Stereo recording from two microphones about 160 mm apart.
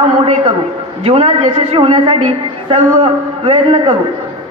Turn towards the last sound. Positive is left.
turn(degrees=-35)  # may be behind; listen again after turning